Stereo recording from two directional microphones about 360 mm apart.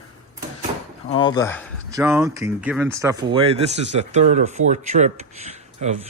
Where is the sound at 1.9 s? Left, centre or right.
Centre.